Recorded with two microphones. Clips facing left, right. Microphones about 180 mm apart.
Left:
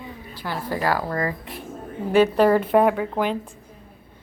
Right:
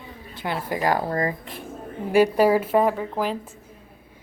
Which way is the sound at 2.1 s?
10° right (ahead or behind).